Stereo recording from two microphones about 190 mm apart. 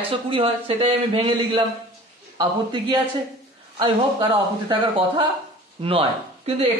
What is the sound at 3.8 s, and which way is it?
Speech, 30° right (ahead or behind).